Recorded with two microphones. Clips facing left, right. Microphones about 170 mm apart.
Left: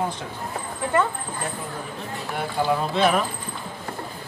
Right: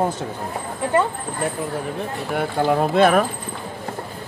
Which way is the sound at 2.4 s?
55° right (ahead or behind).